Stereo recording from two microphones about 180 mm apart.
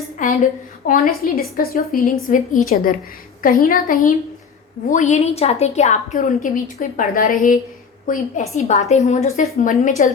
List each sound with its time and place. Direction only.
0.2 s a woman's voice: 45° left (ahead or behind)